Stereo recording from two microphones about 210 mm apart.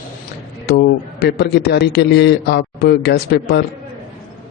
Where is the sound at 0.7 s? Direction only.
50° left (ahead or behind).